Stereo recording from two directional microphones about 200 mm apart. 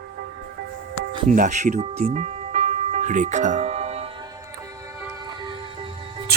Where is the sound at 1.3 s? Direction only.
35° right (ahead or behind).